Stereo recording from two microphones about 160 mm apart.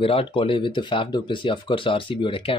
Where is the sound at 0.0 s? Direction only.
35° left (ahead or behind).